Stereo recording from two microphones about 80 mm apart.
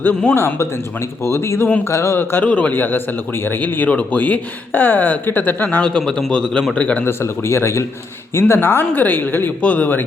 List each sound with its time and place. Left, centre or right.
0.3 s speech: left
5.8 s a man's voice: centre
7.0 s speech: left